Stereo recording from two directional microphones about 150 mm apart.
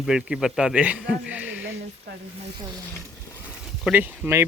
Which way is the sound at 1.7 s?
90° right.